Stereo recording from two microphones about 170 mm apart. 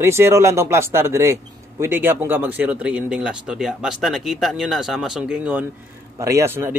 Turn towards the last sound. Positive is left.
turn(degrees=-15)  # may be behind; listen again after turning